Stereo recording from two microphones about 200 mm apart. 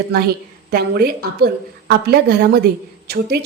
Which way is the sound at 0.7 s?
50° right (ahead or behind).